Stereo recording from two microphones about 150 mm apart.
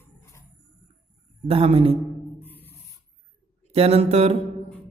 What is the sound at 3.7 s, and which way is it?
Speech, 45° right (ahead or behind).